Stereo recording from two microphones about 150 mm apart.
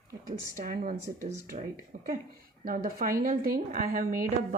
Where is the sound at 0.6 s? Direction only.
70° right (ahead or behind).